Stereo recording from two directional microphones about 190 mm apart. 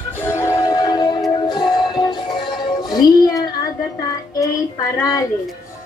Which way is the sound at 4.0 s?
20° left (ahead or behind).